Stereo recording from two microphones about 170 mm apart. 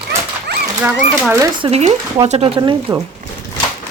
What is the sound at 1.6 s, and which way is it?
Speech, 40° right (ahead or behind).